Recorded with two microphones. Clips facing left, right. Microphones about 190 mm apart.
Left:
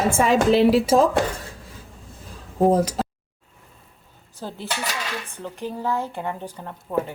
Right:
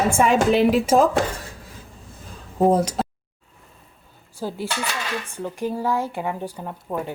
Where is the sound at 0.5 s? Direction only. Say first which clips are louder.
Left 1 dB; 35° left (ahead or behind).